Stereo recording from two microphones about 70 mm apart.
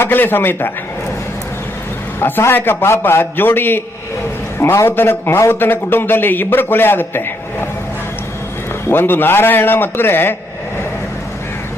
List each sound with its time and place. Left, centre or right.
0.0 s a man's voice: left
2.5 s a man's voice: left
8.9 s a man's voice: left